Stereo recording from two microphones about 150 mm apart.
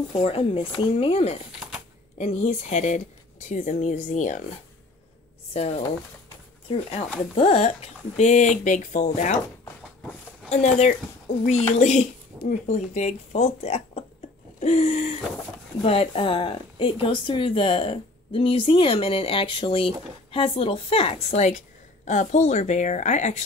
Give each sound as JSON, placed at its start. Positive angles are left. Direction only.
{"t": 0.1, "sound": "speech", "side_deg": 40}
{"t": 10.5, "sound": "speech", "side_deg": 50}
{"t": 12.4, "sound": "speech", "side_deg": 60}
{"t": 14.6, "sound": "hoot", "side_deg": 50}
{"t": 15.8, "sound": "speech", "side_deg": 40}